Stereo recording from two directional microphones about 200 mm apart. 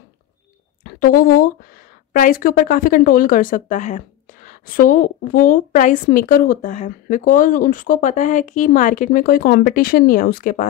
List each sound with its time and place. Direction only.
0.8 s speech: 45° left (ahead or behind)